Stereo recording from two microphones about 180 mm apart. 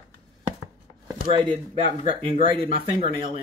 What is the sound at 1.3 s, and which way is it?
A woman's voice, 30° right (ahead or behind).